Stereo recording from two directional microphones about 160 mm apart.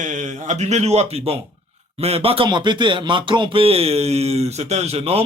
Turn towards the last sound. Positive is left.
turn(degrees=-40)  # may be behind; listen again after turning